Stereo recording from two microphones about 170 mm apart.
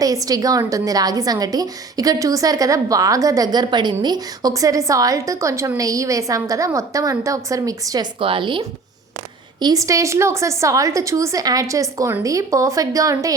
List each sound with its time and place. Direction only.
0.0 s a woman's voice: 20° right (ahead or behind)